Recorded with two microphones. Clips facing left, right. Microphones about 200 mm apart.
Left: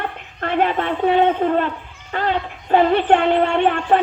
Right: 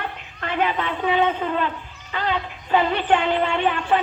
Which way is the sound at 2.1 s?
50° left (ahead or behind).